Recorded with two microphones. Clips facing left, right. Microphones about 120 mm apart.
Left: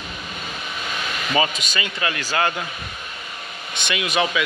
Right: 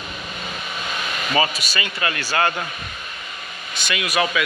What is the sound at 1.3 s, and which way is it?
Speech, 20° left (ahead or behind).